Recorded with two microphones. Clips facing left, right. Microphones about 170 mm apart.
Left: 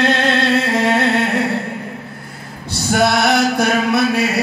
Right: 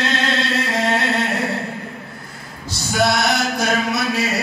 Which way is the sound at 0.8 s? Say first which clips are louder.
Left 4 dB; 60° left (ahead or behind).